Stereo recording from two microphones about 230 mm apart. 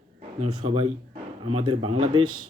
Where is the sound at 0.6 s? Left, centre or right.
Right.